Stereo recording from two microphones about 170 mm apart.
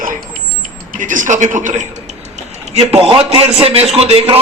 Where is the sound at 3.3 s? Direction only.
35° right (ahead or behind).